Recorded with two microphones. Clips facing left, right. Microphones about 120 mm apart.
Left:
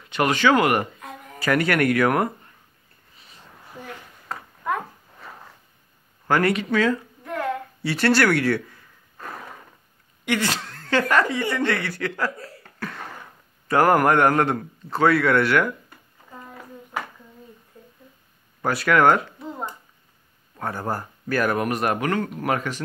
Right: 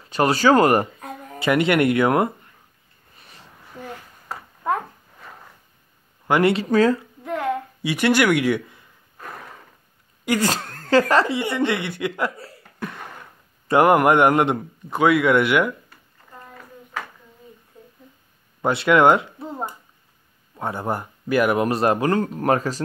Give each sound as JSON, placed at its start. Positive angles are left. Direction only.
{"t": 0.0, "sound": "a sound", "side_deg": -35}
{"t": 1.4, "sound": "speech", "side_deg": -20}
{"t": 6.2, "sound": "speech", "side_deg": -20}
{"t": 6.5, "sound": "speech", "side_deg": -35}
{"t": 7.2, "sound": "a sound", "side_deg": -20}
{"t": 10.2, "sound": "speech", "side_deg": -40}
{"t": 12.7, "sound": "cough", "side_deg": -15}
{"t": 13.7, "sound": "a man's voice", "side_deg": -20}
{"t": 16.3, "sound": "a sound", "side_deg": 5}
{"t": 17.8, "sound": "a sound", "side_deg": -15}
{"t": 18.6, "sound": "speech", "side_deg": -25}
{"t": 20.5, "sound": "speech", "side_deg": -20}
{"t": 21.6, "sound": "speech", "side_deg": -30}